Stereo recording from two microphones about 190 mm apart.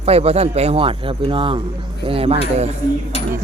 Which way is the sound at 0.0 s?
35° right (ahead or behind).